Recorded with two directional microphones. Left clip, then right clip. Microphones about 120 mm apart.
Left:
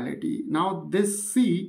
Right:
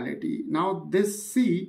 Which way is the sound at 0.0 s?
20° left (ahead or behind).